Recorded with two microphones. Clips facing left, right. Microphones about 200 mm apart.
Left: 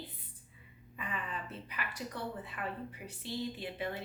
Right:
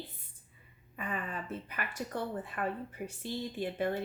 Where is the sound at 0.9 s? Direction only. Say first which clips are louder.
Right 3 dB; 50° right (ahead or behind).